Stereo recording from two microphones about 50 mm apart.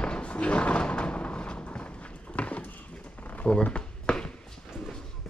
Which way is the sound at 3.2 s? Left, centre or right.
Left.